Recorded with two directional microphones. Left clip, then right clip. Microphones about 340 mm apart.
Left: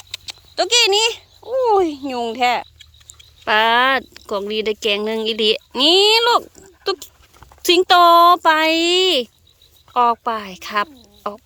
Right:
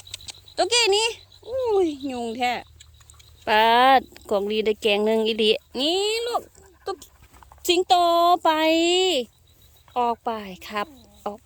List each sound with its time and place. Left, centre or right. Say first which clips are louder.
0.1 s speech: left 6 dB; centre
6.3 s a sound: left 10 dB; centre
7.6 s speech: left 7 dB; centre